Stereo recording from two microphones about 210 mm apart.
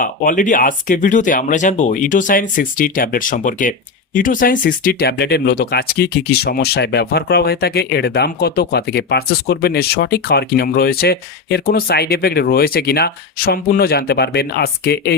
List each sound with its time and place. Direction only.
0.0 s speech: 40° left (ahead or behind)